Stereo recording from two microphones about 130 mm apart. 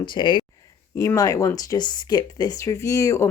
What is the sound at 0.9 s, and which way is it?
Speech, 25° left (ahead or behind).